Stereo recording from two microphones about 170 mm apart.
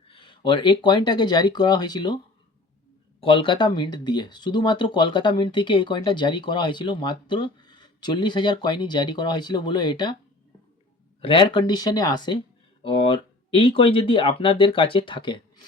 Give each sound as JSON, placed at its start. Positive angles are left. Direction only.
{"t": 0.1, "sound": "speech", "side_deg": 30}
{"t": 3.2, "sound": "speech", "side_deg": 30}
{"t": 11.2, "sound": "speech", "side_deg": 30}